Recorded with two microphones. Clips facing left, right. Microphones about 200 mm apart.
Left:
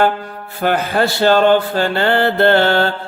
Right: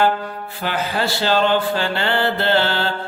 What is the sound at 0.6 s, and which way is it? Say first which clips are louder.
Mantra: left 7 dB; 50° left (ahead or behind).